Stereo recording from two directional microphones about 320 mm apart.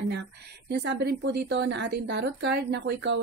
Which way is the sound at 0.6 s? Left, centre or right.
Right.